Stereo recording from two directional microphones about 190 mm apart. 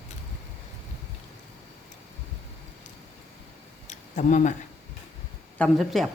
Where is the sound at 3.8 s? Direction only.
40° left (ahead or behind).